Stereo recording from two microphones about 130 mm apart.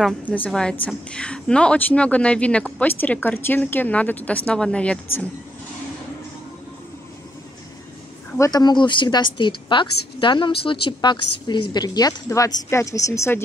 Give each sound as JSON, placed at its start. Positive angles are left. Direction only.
{"t": 0.2, "sound": "speech", "side_deg": 10}
{"t": 8.4, "sound": "a woman's voice", "side_deg": 30}